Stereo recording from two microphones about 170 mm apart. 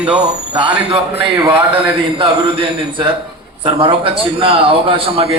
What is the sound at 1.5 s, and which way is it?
A man's voice, 30° right (ahead or behind).